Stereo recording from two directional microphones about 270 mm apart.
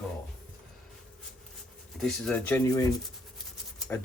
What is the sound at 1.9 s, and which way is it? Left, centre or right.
Speech, centre.